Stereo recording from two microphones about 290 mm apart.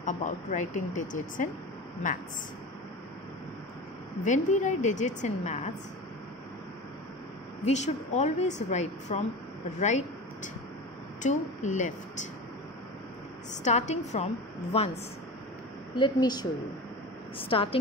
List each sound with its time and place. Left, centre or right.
0.0 s a woman's voice: left
4.2 s a woman's voice: left
7.6 s a woman's voice: left
13.5 s a woman's voice: left
15.9 s a woman's voice: centre